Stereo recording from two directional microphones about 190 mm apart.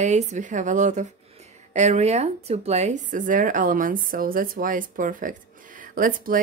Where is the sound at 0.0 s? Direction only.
40° right (ahead or behind).